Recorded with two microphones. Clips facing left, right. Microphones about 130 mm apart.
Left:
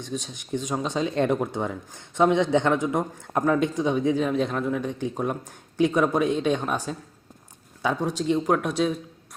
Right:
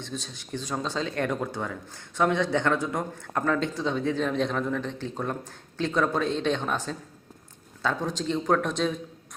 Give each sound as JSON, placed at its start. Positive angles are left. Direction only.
{"t": 0.0, "sound": "speech", "side_deg": 15}